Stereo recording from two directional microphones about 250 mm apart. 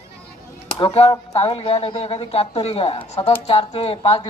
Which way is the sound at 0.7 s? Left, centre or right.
Left.